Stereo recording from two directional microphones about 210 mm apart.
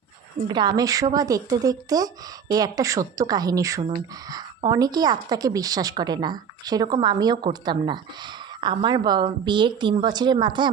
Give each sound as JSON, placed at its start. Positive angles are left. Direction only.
{"t": 0.4, "sound": "a woman's voice", "side_deg": -20}